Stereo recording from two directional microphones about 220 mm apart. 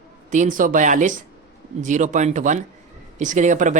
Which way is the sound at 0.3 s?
35° right (ahead or behind).